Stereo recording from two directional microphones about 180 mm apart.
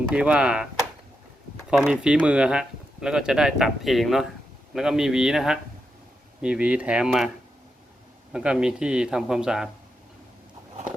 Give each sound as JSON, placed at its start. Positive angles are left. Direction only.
{"t": 0.1, "sound": "speech", "side_deg": -5}
{"t": 1.8, "sound": "speech", "side_deg": -5}
{"t": 8.3, "sound": "speech", "side_deg": -5}